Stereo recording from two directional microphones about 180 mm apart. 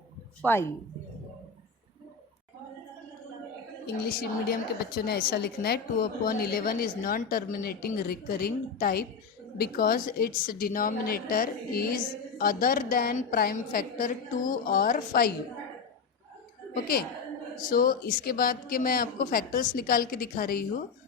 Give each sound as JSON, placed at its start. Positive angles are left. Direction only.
{"t": 0.4, "sound": "speech", "side_deg": 10}
{"t": 3.8, "sound": "a woman's voice", "side_deg": 60}
{"t": 16.8, "sound": "a woman's voice", "side_deg": 55}